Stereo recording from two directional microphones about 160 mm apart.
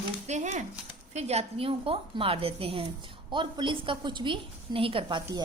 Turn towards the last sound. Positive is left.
turn(degrees=-30)  # may be behind; listen again after turning